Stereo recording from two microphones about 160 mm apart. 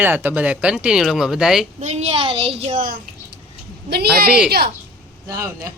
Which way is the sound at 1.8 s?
45° right (ahead or behind).